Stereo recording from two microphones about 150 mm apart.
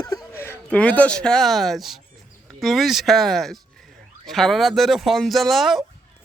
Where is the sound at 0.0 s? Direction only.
25° left (ahead or behind).